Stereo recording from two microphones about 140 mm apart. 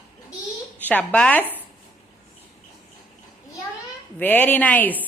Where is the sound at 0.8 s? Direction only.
10° left (ahead or behind).